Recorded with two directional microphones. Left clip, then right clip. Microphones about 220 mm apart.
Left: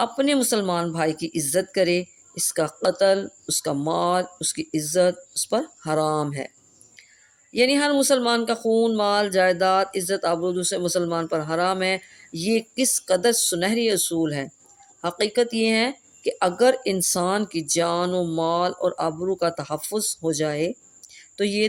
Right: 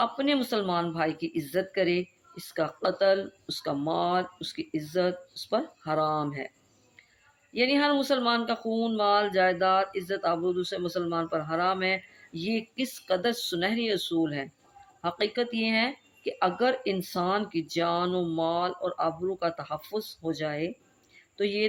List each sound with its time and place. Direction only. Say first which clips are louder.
0.0 s speech: left 5 dB; 55° left (ahead or behind)
7.5 s speech: left 5 dB; 55° left (ahead or behind)